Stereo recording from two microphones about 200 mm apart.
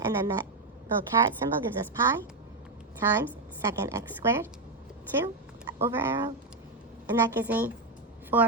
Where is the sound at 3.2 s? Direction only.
15° right (ahead or behind).